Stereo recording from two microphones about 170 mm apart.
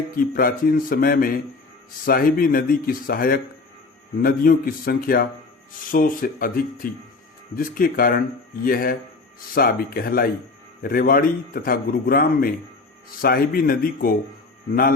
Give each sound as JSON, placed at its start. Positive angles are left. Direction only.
{"t": 0.2, "sound": "a man's voice", "side_deg": 60}